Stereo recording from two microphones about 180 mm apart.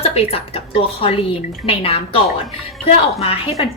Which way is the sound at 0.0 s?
35° left (ahead or behind).